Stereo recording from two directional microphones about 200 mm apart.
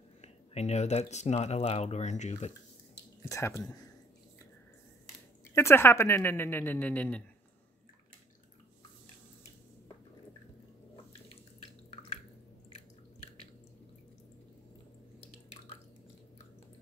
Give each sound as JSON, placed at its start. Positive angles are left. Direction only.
{"t": 0.2, "sound": "speech", "side_deg": 35}
{"t": 3.3, "sound": "a woman's voice", "side_deg": 15}
{"t": 5.5, "sound": "a woman's voice", "side_deg": 10}